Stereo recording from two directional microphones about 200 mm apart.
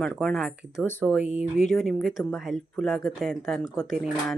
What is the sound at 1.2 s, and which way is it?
Speech, 35° left (ahead or behind).